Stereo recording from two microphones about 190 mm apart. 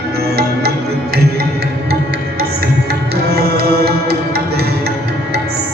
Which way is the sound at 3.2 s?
55° right (ahead or behind).